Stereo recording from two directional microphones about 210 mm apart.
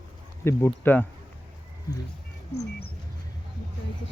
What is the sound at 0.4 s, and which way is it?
Speech, 10° left (ahead or behind).